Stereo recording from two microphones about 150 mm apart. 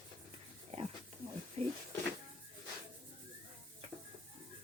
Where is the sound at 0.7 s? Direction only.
40° right (ahead or behind).